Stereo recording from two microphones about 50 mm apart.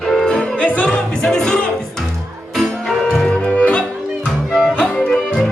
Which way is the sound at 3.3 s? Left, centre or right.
Left.